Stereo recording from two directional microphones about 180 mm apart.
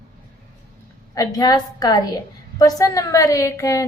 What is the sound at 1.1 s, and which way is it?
A woman's voice, 20° left (ahead or behind).